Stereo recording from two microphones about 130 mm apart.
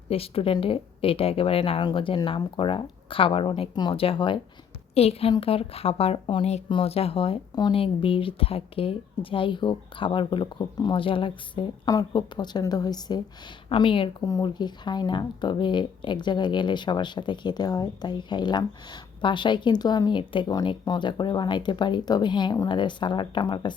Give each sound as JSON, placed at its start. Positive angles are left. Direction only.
{"t": 0.1, "sound": "speech", "side_deg": 45}